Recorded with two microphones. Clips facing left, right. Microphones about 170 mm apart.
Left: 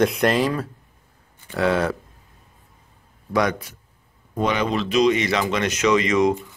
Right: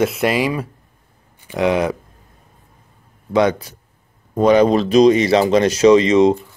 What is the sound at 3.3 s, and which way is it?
Speech, 30° right (ahead or behind).